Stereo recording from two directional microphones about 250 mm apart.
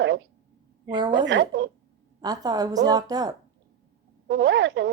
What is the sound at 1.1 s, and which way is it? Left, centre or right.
Speech, right.